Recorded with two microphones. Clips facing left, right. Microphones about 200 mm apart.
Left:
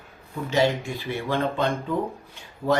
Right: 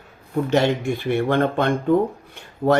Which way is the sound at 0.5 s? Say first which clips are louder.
Right 2 dB; 60° right (ahead or behind).